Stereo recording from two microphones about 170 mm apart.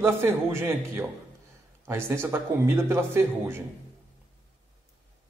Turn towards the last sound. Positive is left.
turn(degrees=-15)  # may be behind; listen again after turning